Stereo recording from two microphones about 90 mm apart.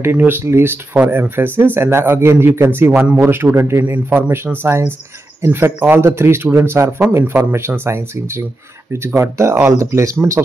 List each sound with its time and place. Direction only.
0.0 s a man's voice: 25° right (ahead or behind)